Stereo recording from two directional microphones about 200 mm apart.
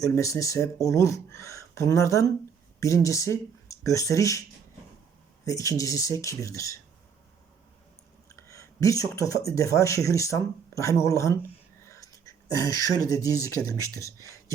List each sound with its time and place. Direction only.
0.0 s speech: 15° left (ahead or behind)
5.5 s speech: 15° left (ahead or behind)
8.4 s speech: 15° left (ahead or behind)